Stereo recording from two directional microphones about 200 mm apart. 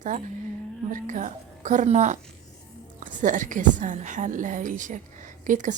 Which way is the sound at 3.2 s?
40° right (ahead or behind).